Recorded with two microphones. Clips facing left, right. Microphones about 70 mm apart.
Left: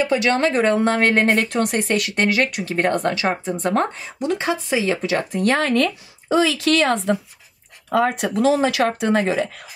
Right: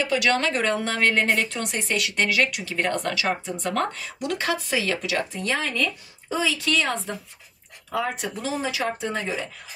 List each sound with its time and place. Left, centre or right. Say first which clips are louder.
0.0 s a woman's voice: left 4 dB; left
5.3 s speech: left 9 dB; left
7.9 s speech: left 8 dB; left